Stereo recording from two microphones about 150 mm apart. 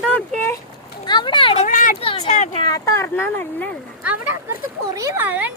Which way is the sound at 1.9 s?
35° left (ahead or behind).